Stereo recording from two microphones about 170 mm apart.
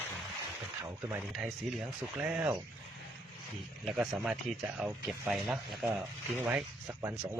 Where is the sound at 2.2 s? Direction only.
5° right (ahead or behind).